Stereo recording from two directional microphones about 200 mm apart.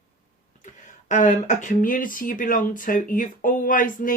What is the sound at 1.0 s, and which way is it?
Speech, 40° left (ahead or behind).